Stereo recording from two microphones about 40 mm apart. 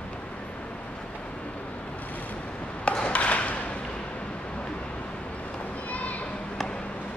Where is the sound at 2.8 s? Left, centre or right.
Left.